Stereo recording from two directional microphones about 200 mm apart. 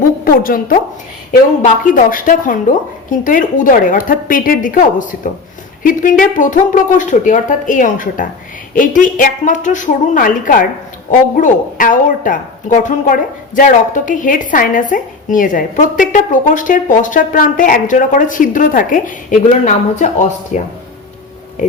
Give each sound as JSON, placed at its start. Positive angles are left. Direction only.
{"t": 0.3, "sound": "a woman's voice", "side_deg": 45}